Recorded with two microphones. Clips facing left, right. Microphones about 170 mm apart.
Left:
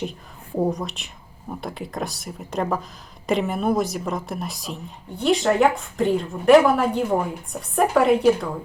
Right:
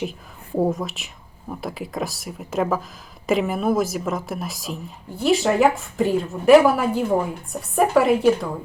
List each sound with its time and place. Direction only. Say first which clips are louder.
0.0 s a woman's voice: right 1 dB; 5° right (ahead or behind)